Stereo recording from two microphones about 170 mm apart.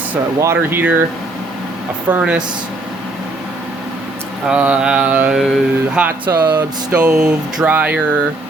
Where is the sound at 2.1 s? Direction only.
5° right (ahead or behind).